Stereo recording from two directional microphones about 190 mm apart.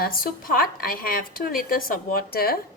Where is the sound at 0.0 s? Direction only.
50° left (ahead or behind).